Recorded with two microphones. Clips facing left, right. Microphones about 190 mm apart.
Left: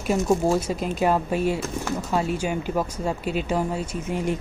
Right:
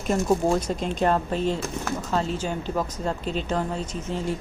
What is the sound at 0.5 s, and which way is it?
Speech, 5° left (ahead or behind).